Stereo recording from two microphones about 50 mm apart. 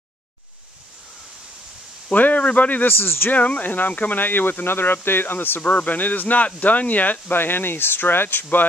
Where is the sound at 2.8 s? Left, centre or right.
Left.